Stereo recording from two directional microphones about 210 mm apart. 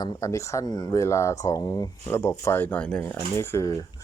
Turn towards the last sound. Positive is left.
turn(degrees=15)  # may be behind; listen again after turning